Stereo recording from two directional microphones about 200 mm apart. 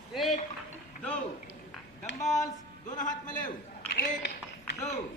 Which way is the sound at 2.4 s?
40° left (ahead or behind).